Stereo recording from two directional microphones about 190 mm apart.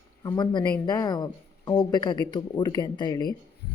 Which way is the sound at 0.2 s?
20° left (ahead or behind).